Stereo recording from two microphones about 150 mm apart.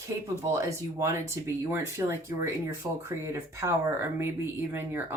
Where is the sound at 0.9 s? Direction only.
20° right (ahead or behind).